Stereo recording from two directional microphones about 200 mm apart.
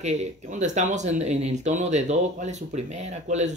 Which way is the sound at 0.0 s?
35° right (ahead or behind).